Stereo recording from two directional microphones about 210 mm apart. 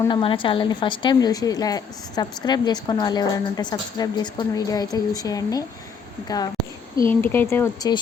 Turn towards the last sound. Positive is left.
turn(degrees=15)  # may be behind; listen again after turning